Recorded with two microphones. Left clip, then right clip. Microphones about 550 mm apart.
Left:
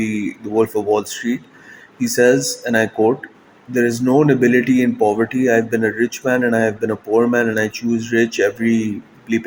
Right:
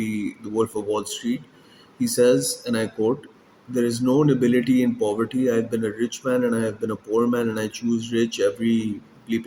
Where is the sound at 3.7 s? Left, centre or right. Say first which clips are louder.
Left 6 dB; right.